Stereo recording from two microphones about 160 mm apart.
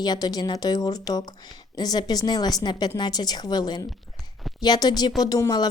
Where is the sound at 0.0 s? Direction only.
25° left (ahead or behind).